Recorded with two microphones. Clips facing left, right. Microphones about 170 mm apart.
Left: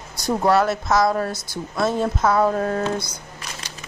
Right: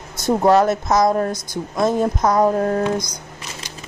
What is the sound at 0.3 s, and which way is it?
Speech, 20° right (ahead or behind).